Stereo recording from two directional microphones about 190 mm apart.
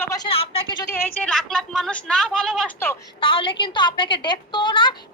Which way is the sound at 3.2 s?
25° left (ahead or behind).